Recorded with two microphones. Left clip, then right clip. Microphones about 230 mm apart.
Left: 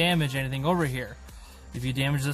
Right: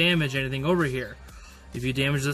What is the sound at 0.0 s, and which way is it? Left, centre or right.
Speech, left.